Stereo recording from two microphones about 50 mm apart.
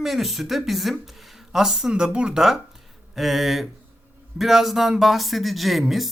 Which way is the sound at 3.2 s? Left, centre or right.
Centre.